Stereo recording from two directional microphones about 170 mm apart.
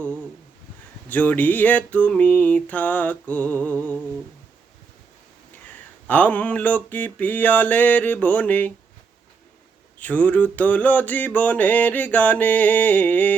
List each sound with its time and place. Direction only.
1.1 s mantra: 10° left (ahead or behind)
6.1 s mantra: 10° left (ahead or behind)
10.0 s mantra: 10° left (ahead or behind)